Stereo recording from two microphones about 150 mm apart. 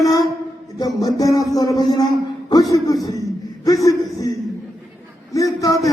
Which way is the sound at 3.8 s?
25° left (ahead or behind).